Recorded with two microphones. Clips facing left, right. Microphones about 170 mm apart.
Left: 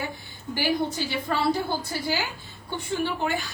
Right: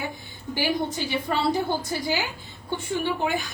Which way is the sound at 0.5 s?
15° right (ahead or behind).